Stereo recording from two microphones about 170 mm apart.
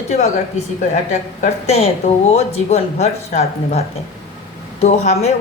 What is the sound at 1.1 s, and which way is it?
Speech, 45° left (ahead or behind).